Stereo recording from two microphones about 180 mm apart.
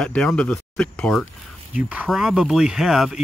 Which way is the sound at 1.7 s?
5° right (ahead or behind).